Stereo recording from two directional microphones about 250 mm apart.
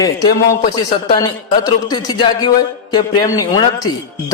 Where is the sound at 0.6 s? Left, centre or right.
Left.